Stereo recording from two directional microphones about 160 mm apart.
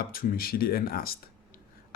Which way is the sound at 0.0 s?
65° left (ahead or behind).